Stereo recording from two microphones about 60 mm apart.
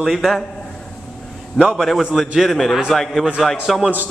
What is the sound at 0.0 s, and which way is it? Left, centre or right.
Speech, centre.